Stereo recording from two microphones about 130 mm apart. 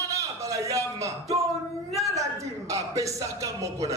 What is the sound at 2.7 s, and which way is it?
A man's voice, 25° right (ahead or behind).